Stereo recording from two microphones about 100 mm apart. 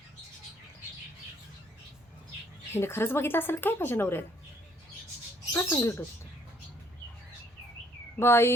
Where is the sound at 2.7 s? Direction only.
25° left (ahead or behind).